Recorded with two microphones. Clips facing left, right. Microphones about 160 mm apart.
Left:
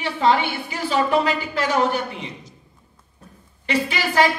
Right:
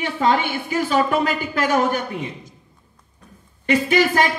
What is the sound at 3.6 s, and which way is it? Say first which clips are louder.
Speech: right 6 dB; 50° right (ahead or behind).